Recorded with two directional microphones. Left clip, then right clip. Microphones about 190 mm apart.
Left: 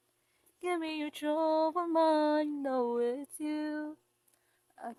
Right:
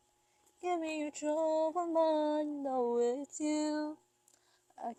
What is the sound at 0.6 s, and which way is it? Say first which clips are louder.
Speech: left 1 dB; 5° left (ahead or behind).